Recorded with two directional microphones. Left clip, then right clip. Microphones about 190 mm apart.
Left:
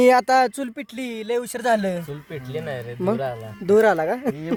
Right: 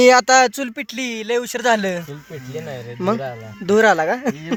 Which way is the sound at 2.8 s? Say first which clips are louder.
Right 3 dB; 5° left (ahead or behind).